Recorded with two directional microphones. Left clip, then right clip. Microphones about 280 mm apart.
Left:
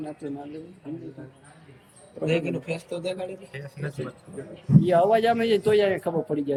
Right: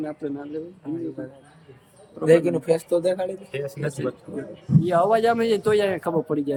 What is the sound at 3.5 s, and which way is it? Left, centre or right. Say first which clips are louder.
Speech: right 8 dB; right.